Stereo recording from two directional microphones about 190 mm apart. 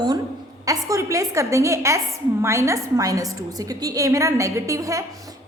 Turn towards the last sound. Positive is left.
turn(degrees=-15)  # may be behind; listen again after turning